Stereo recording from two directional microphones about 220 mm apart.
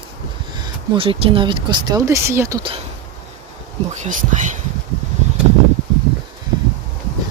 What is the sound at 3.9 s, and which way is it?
Speech, 35° right (ahead or behind).